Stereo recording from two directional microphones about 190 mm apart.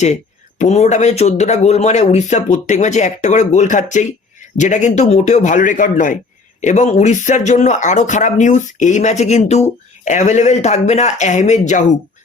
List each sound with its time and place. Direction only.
0.6 s speech: 35° left (ahead or behind)